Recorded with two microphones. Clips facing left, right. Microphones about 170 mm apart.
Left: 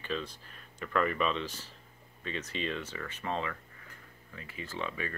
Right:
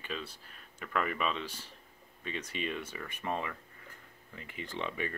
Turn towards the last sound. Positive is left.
turn(degrees=-20)  # may be behind; listen again after turning